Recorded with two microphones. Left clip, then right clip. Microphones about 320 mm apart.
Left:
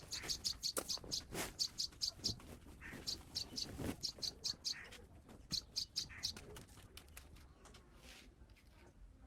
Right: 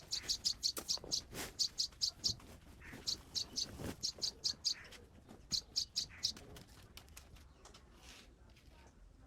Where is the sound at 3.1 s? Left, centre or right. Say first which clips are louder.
Right 5 dB; right.